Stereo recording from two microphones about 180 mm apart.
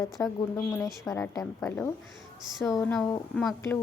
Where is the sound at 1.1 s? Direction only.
15° left (ahead or behind).